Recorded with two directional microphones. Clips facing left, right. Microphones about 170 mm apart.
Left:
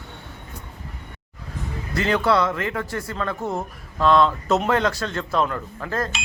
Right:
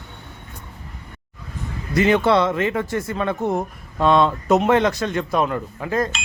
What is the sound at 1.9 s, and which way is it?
A man's voice, 20° right (ahead or behind).